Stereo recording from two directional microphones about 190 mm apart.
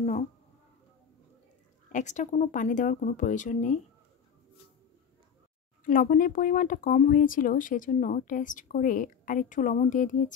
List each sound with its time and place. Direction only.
0.0 s speech: 35° left (ahead or behind)
1.9 s speech: 40° left (ahead or behind)
5.9 s speech: 45° left (ahead or behind)